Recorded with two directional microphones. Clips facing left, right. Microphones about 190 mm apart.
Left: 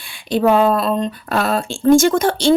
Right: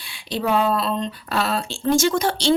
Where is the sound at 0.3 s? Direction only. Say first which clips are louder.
Left 7 dB; 50° left (ahead or behind).